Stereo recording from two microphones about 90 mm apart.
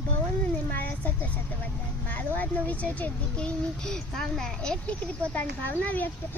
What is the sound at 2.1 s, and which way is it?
A child's voice, 20° left (ahead or behind).